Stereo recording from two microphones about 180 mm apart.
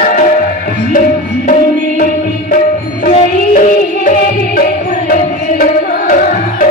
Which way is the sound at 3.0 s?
45° left (ahead or behind).